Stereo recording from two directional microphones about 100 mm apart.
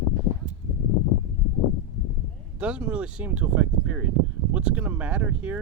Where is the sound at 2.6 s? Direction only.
15° right (ahead or behind).